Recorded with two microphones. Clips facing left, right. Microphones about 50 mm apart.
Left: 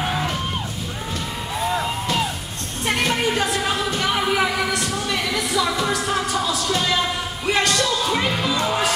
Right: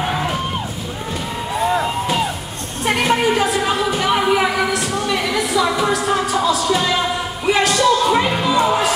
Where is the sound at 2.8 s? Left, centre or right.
Centre.